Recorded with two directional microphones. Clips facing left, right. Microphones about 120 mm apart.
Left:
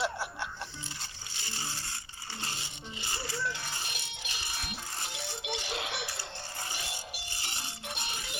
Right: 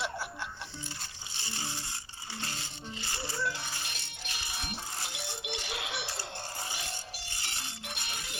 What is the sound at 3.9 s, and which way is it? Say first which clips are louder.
Music: left 1 dB; 5° left (ahead or behind).